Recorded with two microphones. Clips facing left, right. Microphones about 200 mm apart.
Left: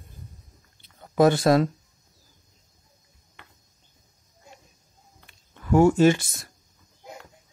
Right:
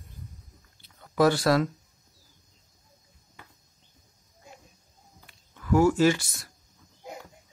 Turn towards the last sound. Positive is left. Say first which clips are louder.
# left 4 dB
turn(degrees=25)  # may be behind; listen again after turning